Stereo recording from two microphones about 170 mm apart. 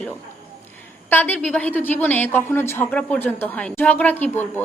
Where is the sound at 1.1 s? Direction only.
10° left (ahead or behind).